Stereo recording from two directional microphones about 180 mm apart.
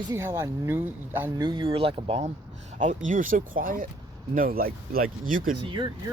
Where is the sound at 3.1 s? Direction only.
50° right (ahead or behind).